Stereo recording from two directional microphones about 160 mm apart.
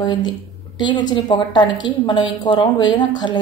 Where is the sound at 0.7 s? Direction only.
30° left (ahead or behind).